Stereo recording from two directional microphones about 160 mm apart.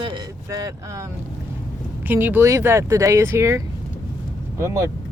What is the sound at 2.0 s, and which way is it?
Speech, 10° right (ahead or behind).